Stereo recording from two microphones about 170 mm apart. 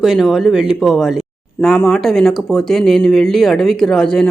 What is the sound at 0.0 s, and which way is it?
Speech, centre (ahead or behind).